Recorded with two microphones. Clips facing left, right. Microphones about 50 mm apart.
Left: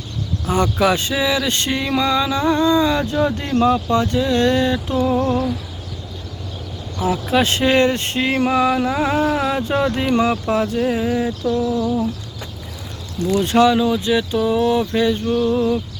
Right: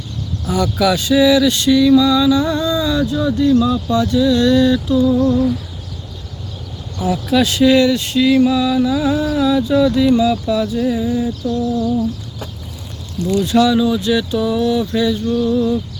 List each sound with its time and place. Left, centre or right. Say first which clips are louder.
0.4 s speech: right 1 dB; left
3.5 s a sound: even; left
3.8 s speech: right 3 dB; left
4.9 s a sound: right 2 dB; left
7.0 s speech: right 2 dB; left
13.4 s speech: right 1 dB; left